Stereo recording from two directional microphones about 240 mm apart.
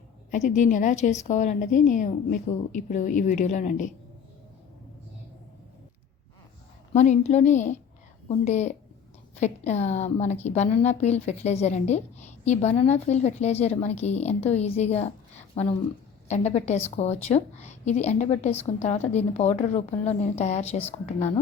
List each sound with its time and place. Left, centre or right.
0.3 s a woman's voice: left
6.9 s a woman's voice: left